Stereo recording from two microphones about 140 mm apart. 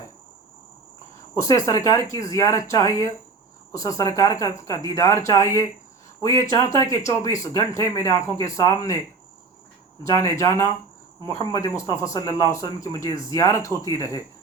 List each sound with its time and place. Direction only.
1.4 s speech: 20° left (ahead or behind)
10.0 s speech: 20° left (ahead or behind)